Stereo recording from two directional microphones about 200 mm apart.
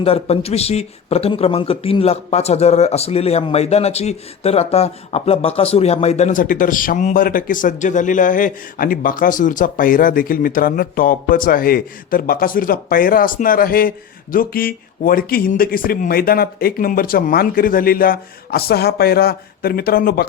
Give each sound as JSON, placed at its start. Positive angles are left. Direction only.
{"t": 0.0, "sound": "speech", "side_deg": 30}